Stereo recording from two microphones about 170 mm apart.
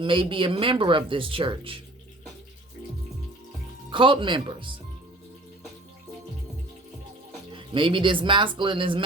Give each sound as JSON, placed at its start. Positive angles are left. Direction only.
{"t": 0.0, "sound": "speech", "side_deg": -30}
{"t": 3.9, "sound": "speech", "side_deg": -30}
{"t": 7.5, "sound": "speech", "side_deg": -30}